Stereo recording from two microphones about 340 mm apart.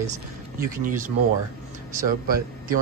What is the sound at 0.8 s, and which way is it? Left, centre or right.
Speech, right.